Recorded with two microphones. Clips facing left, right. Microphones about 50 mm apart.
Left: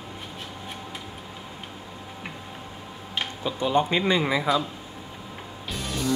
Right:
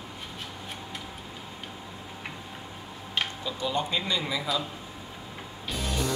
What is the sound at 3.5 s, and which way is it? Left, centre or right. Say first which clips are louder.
A man's voice: left 10 dB; left.